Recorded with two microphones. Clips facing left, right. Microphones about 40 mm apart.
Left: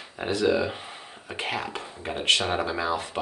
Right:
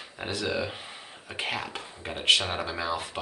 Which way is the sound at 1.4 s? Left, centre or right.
Centre.